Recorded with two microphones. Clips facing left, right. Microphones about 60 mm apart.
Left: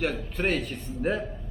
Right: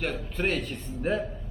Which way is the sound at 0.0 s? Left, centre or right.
Centre.